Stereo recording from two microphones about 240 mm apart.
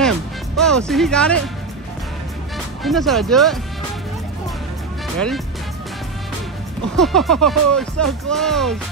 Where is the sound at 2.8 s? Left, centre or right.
Centre.